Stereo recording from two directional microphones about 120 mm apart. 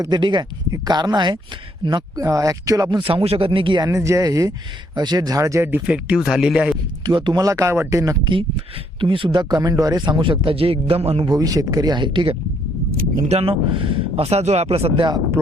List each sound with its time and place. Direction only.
0.0 s speech: 40° right (ahead or behind)
2.2 s speech: 30° right (ahead or behind)
3.2 s a man's voice: 45° right (ahead or behind)
3.8 s speech: 25° right (ahead or behind); by 6.7 s 5° right (ahead or behind)
7.0 s speech: 40° right (ahead or behind)
9.0 s a man's voice: 45° right (ahead or behind)
11.3 s speech: 30° right (ahead or behind)
13.1 s speech: 65° right (ahead or behind)